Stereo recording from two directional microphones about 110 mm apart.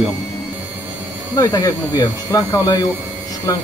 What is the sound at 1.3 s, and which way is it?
Speech, 30° left (ahead or behind).